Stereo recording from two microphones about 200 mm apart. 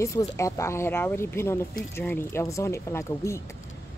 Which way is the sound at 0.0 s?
15° left (ahead or behind).